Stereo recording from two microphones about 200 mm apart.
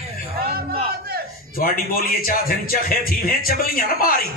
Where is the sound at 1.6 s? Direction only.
45° left (ahead or behind).